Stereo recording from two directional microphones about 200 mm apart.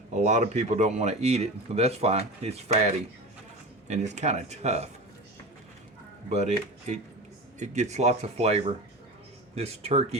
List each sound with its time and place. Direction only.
0.1 s speech: 35° right (ahead or behind)
6.2 s speech: 35° right (ahead or behind)
7.6 s speech: 35° right (ahead or behind)